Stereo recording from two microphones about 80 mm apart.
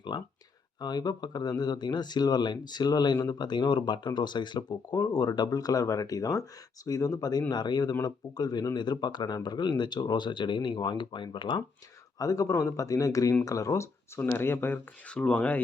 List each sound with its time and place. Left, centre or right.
0.1 s speech: left
0.8 s speech: left
5.0 s speech: left
12.2 s speech: left
14.2 s speech: left
15.1 s speech: centre